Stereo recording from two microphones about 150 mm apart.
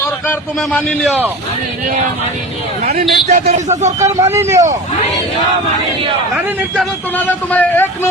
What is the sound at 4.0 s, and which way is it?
Speech, 20° right (ahead or behind).